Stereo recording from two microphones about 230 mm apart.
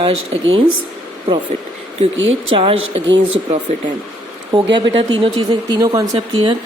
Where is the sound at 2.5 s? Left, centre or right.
Right.